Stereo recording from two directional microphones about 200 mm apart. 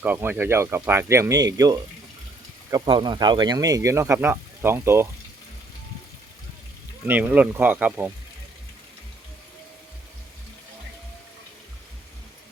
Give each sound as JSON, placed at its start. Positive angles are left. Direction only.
{"t": 0.0, "sound": "speech", "side_deg": -10}
{"t": 7.0, "sound": "speech", "side_deg": -10}